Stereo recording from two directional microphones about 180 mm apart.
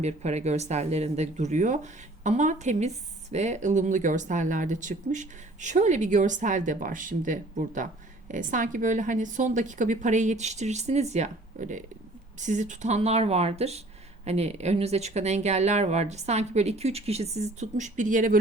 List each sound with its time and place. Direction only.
0.0 s speech: 40° right (ahead or behind)